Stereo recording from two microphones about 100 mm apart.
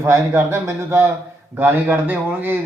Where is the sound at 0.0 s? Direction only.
25° right (ahead or behind).